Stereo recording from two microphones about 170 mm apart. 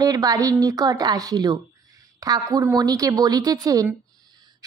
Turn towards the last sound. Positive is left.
turn(degrees=-25)  # may be behind; listen again after turning